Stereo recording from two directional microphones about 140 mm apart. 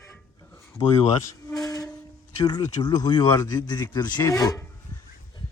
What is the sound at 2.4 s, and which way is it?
Speech, 30° left (ahead or behind).